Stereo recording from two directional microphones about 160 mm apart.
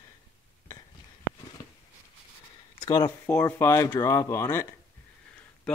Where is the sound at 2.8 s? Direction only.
30° left (ahead or behind).